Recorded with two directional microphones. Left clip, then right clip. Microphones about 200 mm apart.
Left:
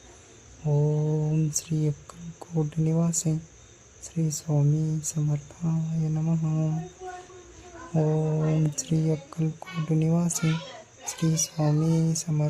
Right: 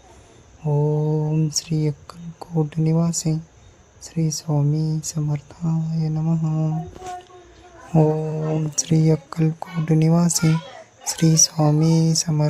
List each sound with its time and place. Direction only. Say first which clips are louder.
0.6 s speech: right 5 dB; 15° right (ahead or behind)
7.9 s speech: right 7 dB; 15° right (ahead or behind)